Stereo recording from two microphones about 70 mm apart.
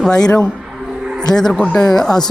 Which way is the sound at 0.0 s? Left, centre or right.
Centre.